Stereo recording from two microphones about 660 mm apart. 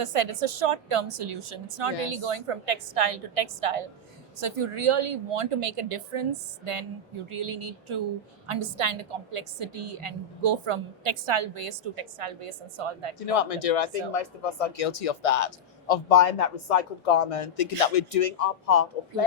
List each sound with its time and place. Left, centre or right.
0.0 s a woman's voice: right
13.1 s a man's voice: left